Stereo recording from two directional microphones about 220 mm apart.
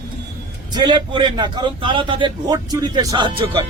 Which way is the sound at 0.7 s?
20° right (ahead or behind).